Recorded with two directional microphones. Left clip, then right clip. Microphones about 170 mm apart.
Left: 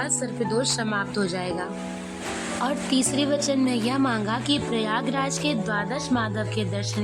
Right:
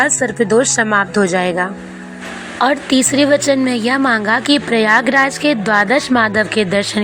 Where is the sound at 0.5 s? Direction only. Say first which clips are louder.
Right 13 dB; 25° right (ahead or behind).